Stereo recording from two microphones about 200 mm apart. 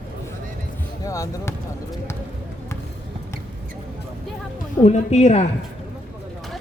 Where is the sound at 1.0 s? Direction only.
15° left (ahead or behind).